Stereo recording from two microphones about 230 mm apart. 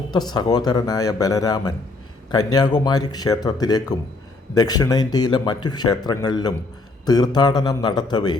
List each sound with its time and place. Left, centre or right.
0.1 s speech: centre